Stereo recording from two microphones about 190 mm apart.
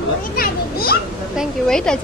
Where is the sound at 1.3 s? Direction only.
5° left (ahead or behind).